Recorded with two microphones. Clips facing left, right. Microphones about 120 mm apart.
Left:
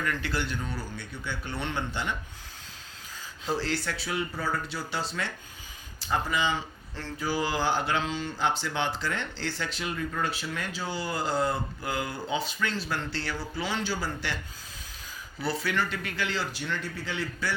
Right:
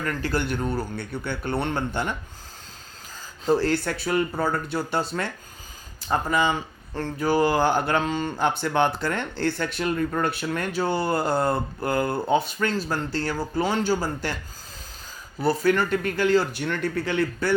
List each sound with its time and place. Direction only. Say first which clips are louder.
0.0 s speech: right 4 dB; 40° right (ahead or behind)
3.4 s speech: right 8 dB; 50° right (ahead or behind)
15.4 s speech: right 8 dB; 45° right (ahead or behind)